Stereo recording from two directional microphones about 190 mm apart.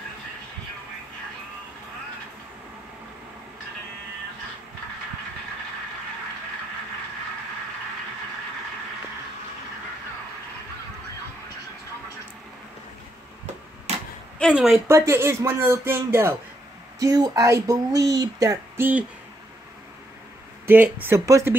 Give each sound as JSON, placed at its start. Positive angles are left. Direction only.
{"t": 14.4, "sound": "speech", "side_deg": 0}
{"t": 14.9, "sound": "speech", "side_deg": -15}
{"t": 20.6, "sound": "speech", "side_deg": -10}